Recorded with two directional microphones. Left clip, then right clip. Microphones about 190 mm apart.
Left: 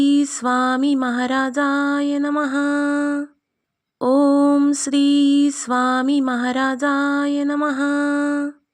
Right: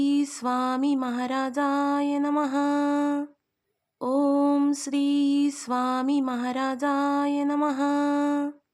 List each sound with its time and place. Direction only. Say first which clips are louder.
0.0 s music: left 7 dB; 20° left (ahead or behind)
4.0 s lullaby: left 8 dB; 25° left (ahead or behind)